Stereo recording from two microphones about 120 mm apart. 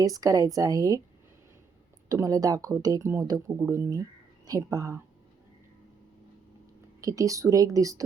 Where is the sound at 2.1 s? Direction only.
30° right (ahead or behind).